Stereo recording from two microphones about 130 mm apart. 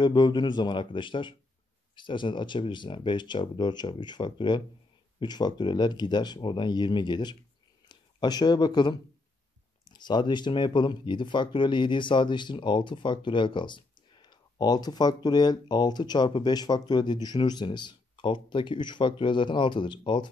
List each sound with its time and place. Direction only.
0.0 s speech: 35° left (ahead or behind)